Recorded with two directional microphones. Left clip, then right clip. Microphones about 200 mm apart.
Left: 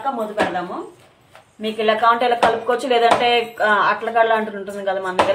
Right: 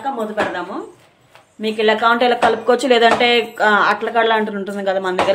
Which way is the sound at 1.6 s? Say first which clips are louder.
Right 1 dB; 35° right (ahead or behind).